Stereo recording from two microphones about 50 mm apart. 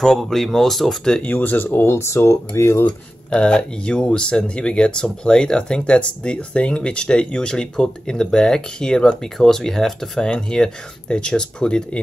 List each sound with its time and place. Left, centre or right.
0.2 s speech: centre
1.2 s speech: left
1.9 s speech: left
3.3 s speech: centre